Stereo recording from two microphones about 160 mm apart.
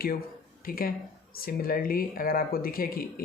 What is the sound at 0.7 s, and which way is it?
A man's voice, 65° left (ahead or behind).